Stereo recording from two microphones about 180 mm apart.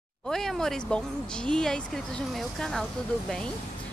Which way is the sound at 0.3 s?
5° left (ahead or behind).